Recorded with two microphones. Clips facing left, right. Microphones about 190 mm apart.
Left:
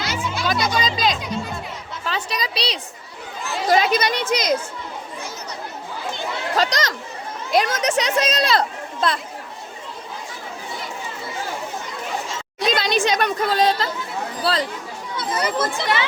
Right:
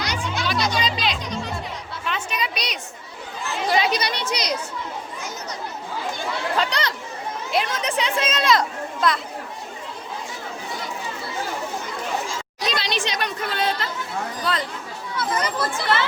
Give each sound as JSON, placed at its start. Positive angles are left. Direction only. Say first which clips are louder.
{"t": 0.0, "sound": "music", "louder": "left 1 dB", "side_deg": 5}
{"t": 0.4, "sound": "music", "louder": "left 2 dB", "side_deg": 45}
{"t": 1.2, "sound": "music", "louder": "left 2 dB", "side_deg": 5}
{"t": 2.0, "sound": "a woman's voice", "louder": "left 1 dB", "side_deg": 35}
{"t": 3.9, "sound": "speech", "louder": "left 5 dB", "side_deg": 50}
{"t": 6.5, "sound": "speech", "louder": "left 4 dB", "side_deg": 40}
{"t": 12.7, "sound": "a woman's voice", "louder": "left 7 dB", "side_deg": 45}
{"t": 15.2, "sound": "speech", "louder": "left 2 dB", "side_deg": 25}